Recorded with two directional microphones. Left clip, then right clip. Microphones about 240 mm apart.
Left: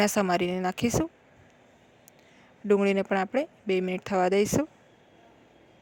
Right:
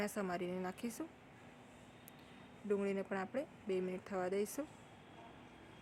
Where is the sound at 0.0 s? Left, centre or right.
Left.